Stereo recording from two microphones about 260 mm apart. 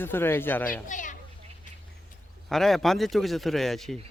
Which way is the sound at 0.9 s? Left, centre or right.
Left.